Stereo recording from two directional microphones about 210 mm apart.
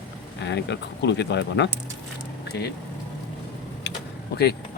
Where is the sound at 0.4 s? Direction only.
55° left (ahead or behind).